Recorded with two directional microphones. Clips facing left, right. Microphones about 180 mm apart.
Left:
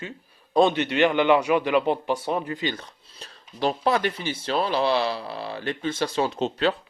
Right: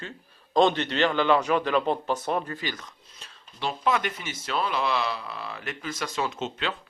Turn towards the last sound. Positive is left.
turn(degrees=35)  # may be behind; listen again after turning